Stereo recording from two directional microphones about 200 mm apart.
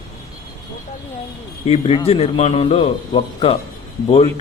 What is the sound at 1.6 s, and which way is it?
A man's voice, 30° left (ahead or behind).